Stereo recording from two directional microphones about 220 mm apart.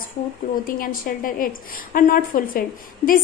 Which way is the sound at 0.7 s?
40° left (ahead or behind).